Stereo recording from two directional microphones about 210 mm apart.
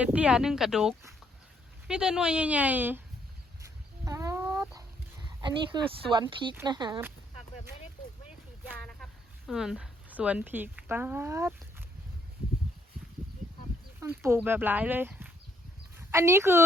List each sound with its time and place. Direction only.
0.0 s speech: 5° right (ahead or behind)
3.6 s dog: 15° right (ahead or behind)
6.6 s speech: 20° right (ahead or behind)
8.8 s a sound: 5° left (ahead or behind)
9.5 s speech: centre (ahead or behind)
14.0 s a woman's voice: 10° right (ahead or behind)